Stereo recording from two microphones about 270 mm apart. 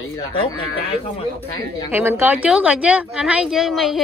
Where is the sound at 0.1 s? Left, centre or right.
Centre.